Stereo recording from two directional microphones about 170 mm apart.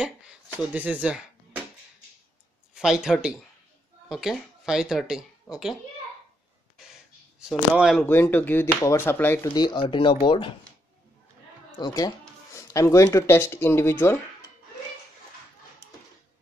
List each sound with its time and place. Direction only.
0.7 s speech: 10° right (ahead or behind)
2.7 s speech: 5° right (ahead or behind)
6.8 s a sound: 5° right (ahead or behind)
8.0 s speech: 10° left (ahead or behind)
9.5 s speech: 25° left (ahead or behind)
11.8 s speech: 25° left (ahead or behind)